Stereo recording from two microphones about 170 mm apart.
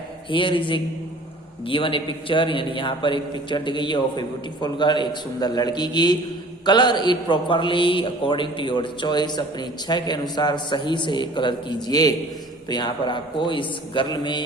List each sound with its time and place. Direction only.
0.3 s a man's voice: 30° left (ahead or behind)